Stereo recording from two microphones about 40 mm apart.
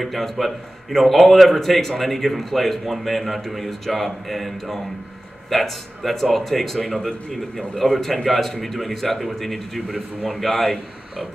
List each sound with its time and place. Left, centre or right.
0.0 s a man's voice: centre
7.2 s a man's voice: centre